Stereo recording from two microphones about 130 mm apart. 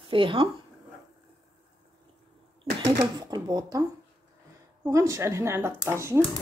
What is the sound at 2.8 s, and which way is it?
Speech, 30° right (ahead or behind).